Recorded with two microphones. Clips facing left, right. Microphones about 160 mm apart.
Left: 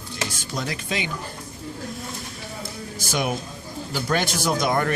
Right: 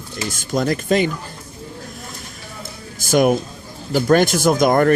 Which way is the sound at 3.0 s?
50° right (ahead or behind).